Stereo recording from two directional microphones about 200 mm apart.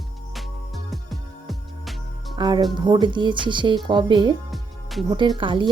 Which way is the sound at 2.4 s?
20° right (ahead or behind).